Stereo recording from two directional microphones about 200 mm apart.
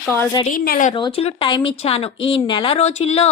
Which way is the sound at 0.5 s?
45° left (ahead or behind).